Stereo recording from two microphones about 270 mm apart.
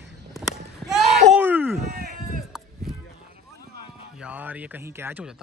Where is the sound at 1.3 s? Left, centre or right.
Centre.